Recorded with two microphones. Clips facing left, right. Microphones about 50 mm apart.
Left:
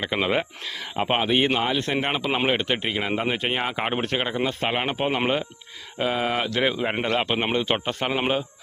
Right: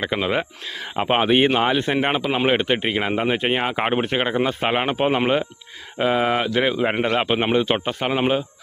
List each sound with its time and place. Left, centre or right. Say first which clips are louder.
0.2 s speech: right 1 dB; centre
0.7 s speech: right 4 dB; centre
1.2 s speech: right 6 dB; right; by 8.4 s centre